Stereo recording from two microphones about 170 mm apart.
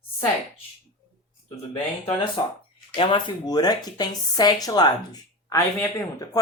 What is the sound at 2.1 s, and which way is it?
Speech, 30° left (ahead or behind).